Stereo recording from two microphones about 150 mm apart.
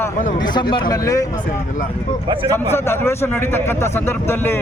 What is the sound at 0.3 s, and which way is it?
Speech, 30° left (ahead or behind).